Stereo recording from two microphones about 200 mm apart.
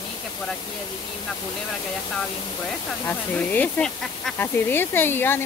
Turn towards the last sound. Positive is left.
turn(degrees=10)  # may be behind; listen again after turning